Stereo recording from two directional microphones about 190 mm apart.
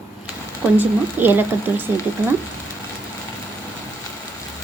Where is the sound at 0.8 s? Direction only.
10° right (ahead or behind).